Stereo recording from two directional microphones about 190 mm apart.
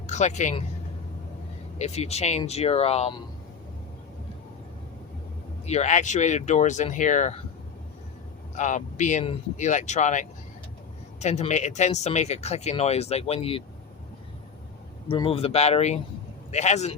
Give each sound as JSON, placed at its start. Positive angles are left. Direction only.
{"t": 0.1, "sound": "speech", "side_deg": 40}
{"t": 1.8, "sound": "speech", "side_deg": 35}
{"t": 5.6, "sound": "speech", "side_deg": 35}
{"t": 8.5, "sound": "speech", "side_deg": 40}
{"t": 15.0, "sound": "speech", "side_deg": 30}